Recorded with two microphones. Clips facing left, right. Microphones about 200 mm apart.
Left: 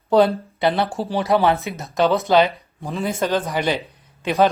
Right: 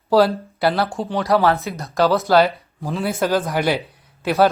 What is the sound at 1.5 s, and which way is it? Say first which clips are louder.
Speech: right 1 dB; centre (ahead or behind).